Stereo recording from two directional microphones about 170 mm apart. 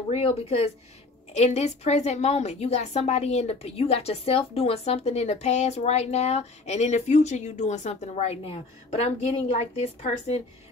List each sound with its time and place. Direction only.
0.1 s a woman's voice: 35° left (ahead or behind)